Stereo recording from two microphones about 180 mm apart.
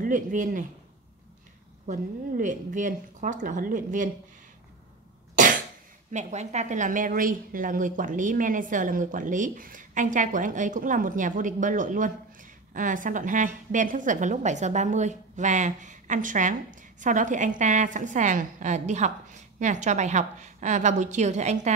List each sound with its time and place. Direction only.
0.0 s a woman's voice: 45° right (ahead or behind)
1.9 s a woman's voice: 45° right (ahead or behind)
5.3 s cough: 45° right (ahead or behind)
6.1 s a woman's voice: 40° right (ahead or behind)